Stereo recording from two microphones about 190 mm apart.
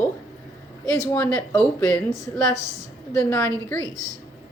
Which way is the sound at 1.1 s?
10° left (ahead or behind).